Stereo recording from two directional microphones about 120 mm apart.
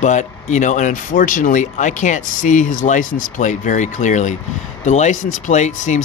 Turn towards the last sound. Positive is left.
turn(degrees=75)  # may be behind; listen again after turning